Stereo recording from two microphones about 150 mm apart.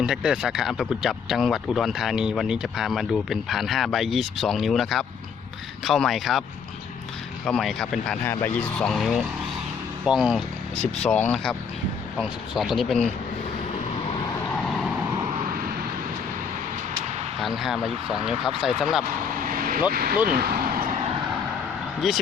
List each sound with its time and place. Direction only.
0.0 s speech: 5° right (ahead or behind)
7.4 s speech: centre (ahead or behind)
10.8 s speech: 45° left (ahead or behind)
12.2 s speech: centre (ahead or behind)
17.4 s speech: centre (ahead or behind)
19.5 s vehicle: 75° right (ahead or behind)
19.9 s speech: 90° right
22.0 s speech: centre (ahead or behind)